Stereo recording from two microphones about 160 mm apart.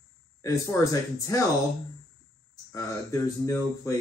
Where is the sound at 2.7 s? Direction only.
20° left (ahead or behind).